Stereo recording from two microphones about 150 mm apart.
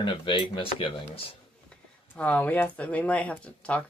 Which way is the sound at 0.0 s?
35° left (ahead or behind).